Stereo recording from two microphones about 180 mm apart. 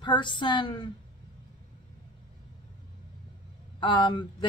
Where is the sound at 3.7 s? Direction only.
25° left (ahead or behind).